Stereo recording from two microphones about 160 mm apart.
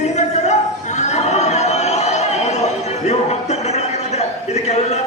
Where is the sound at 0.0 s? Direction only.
45° left (ahead or behind).